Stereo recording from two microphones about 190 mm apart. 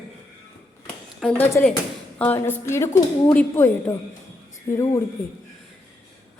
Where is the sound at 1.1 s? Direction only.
5° left (ahead or behind).